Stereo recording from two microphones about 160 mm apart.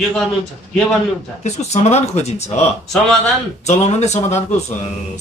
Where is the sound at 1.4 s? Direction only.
45° left (ahead or behind).